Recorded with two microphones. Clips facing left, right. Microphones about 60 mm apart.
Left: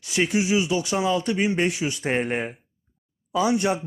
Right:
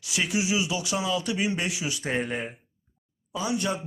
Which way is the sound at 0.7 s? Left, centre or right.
Left.